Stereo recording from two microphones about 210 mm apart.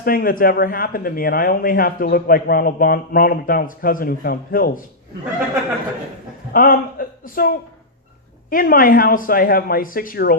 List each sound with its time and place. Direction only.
0.0 s speech: 45° left (ahead or behind)
6.5 s a man's voice: 40° left (ahead or behind)